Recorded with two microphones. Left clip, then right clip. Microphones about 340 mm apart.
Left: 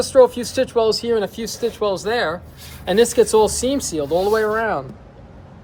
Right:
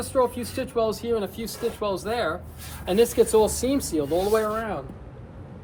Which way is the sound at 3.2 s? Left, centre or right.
Left.